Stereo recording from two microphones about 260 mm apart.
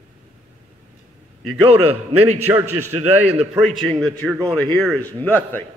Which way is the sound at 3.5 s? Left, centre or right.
Centre.